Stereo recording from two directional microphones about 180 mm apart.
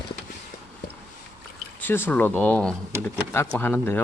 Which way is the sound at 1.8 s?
10° left (ahead or behind).